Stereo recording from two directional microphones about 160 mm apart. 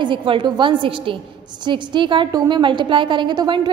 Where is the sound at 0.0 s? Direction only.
30° right (ahead or behind).